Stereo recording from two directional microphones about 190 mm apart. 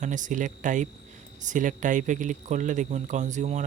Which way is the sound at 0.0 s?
40° right (ahead or behind).